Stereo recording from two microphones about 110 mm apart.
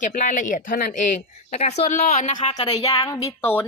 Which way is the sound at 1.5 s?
75° left (ahead or behind).